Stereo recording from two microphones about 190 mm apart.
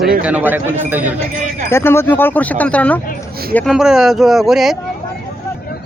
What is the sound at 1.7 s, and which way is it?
Speech, 15° left (ahead or behind).